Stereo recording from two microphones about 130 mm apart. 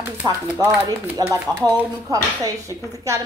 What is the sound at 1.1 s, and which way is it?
Speech, 20° right (ahead or behind).